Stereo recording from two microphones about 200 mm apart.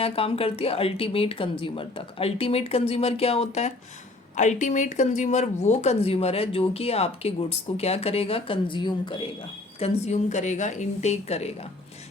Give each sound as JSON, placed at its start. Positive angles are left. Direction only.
{"t": 0.0, "sound": "speech", "side_deg": 30}
{"t": 9.8, "sound": "speech", "side_deg": 35}